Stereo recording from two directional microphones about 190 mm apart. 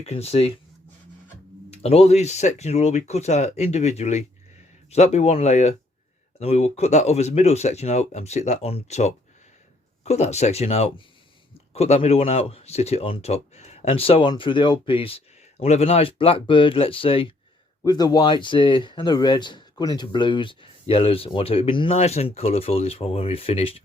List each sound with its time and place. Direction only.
0.0 s speech: 30° left (ahead or behind)
1.7 s speech: 30° left (ahead or behind)